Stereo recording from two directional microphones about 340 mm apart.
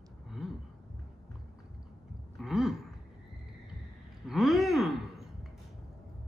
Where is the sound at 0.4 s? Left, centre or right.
Centre.